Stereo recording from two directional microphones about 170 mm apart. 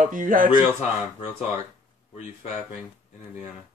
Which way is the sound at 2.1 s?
40° left (ahead or behind).